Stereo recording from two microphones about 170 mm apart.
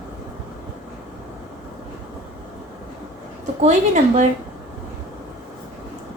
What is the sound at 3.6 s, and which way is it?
Speech, 45° right (ahead or behind).